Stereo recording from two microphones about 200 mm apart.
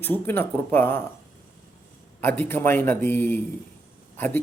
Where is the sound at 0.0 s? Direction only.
10° left (ahead or behind).